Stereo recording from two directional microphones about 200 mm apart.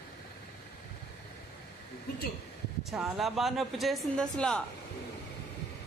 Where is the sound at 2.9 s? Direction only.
Centre (ahead or behind).